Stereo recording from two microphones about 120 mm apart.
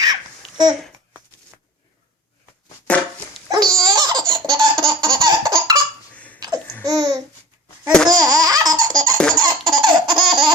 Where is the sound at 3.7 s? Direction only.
30° right (ahead or behind).